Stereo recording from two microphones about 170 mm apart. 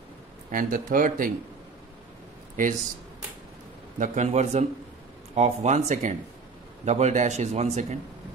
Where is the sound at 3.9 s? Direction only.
45° right (ahead or behind).